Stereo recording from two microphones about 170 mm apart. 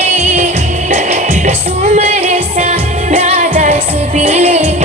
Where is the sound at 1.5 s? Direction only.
40° right (ahead or behind).